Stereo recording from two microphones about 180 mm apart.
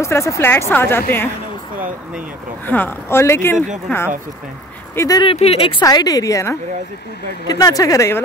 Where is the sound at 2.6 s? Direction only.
10° left (ahead or behind).